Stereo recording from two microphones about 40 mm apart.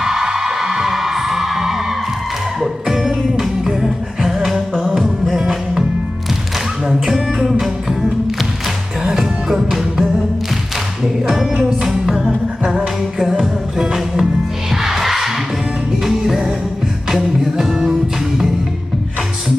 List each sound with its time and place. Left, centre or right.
0.0 s music: centre
6.8 s music: centre
9.1 s music: centre
11.8 s music: centre